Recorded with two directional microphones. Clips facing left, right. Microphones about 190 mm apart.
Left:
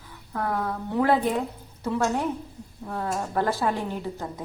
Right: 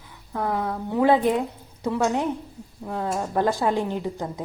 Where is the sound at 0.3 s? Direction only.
15° right (ahead or behind).